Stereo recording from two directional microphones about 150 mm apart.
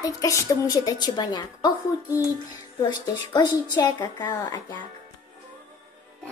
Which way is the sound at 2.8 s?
25° left (ahead or behind).